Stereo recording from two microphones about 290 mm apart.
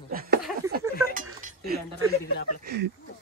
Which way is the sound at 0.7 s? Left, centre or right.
Right.